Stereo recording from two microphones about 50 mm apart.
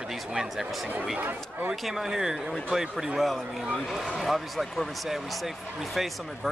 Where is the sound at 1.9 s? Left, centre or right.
Centre.